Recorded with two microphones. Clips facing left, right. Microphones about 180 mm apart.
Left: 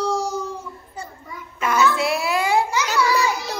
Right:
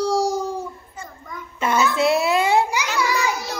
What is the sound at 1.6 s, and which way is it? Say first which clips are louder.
Babbling: right 1 dB; 25° right (ahead or behind).